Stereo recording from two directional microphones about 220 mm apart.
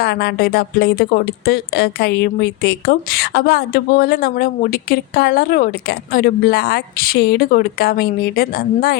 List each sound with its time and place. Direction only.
0.0 s speech: 45° left (ahead or behind)